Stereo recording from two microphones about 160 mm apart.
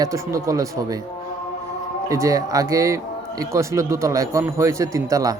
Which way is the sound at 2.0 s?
20° right (ahead or behind).